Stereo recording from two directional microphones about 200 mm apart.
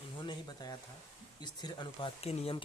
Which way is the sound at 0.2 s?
20° left (ahead or behind).